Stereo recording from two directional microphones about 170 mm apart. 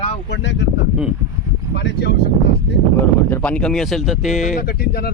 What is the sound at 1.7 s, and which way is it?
Speech, 85° left.